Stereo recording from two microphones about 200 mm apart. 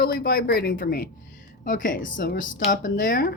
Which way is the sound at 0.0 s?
50° left (ahead or behind).